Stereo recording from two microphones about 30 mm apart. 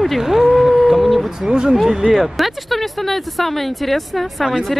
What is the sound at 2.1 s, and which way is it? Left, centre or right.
Speech, centre.